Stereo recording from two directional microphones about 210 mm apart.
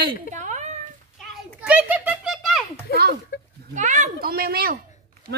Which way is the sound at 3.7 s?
35° right (ahead or behind).